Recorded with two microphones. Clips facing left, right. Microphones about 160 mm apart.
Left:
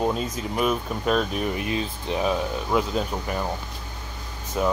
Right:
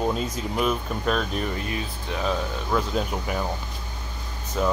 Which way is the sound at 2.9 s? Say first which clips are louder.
Even; centre (ahead or behind).